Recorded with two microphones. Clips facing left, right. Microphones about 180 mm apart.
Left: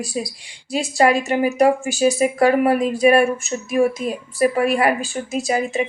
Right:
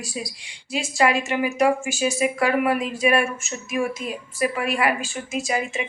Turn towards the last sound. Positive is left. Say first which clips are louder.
# left 5 dB
turn(degrees=35)  # may be behind; listen again after turning